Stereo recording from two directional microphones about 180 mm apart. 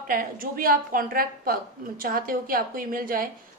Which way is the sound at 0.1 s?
50° right (ahead or behind).